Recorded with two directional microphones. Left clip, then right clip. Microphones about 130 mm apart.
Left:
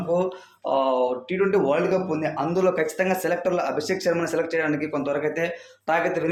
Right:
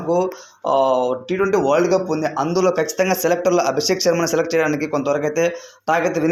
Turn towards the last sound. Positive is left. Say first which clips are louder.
# right 5 dB
turn(degrees=-40)  # may be behind; listen again after turning